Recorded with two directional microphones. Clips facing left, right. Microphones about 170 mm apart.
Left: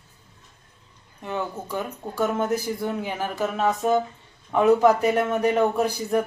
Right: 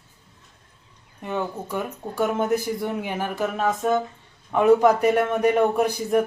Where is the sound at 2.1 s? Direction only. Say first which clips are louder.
Right 1 dB; 15° right (ahead or behind).